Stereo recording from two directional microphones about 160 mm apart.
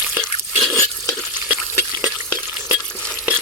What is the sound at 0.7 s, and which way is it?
Stir, 20° left (ahead or behind).